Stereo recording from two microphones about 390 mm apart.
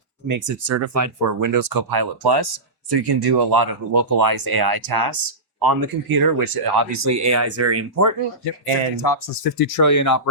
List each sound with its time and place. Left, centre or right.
0.3 s speech: right
6.9 s speech: right
9.0 s speech: left